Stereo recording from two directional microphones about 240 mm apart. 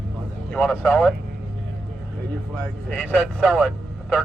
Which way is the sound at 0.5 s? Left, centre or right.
Centre.